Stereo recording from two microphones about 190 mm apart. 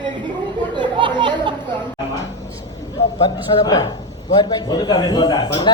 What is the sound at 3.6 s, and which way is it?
A man's voice, 20° left (ahead or behind).